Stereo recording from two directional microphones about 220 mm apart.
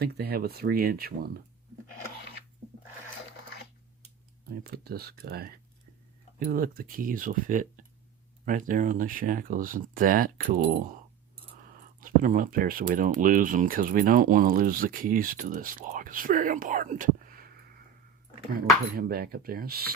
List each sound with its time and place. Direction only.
0.0 s speech: 45° right (ahead or behind)
4.6 s speech: 45° right (ahead or behind)
11.9 s speech: 40° right (ahead or behind)
18.9 s speech: 45° right (ahead or behind)